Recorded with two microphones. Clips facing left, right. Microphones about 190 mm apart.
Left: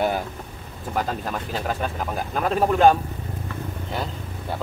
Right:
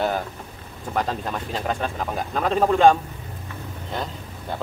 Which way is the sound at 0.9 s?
5° left (ahead or behind).